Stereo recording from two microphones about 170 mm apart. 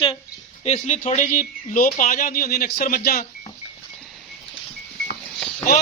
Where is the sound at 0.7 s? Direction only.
45° left (ahead or behind).